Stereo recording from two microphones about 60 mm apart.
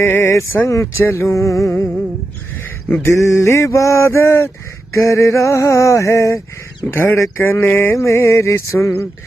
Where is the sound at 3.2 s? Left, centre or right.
Left.